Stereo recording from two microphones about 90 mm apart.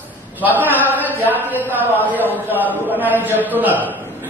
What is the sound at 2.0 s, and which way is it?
A man's voice, 20° right (ahead or behind).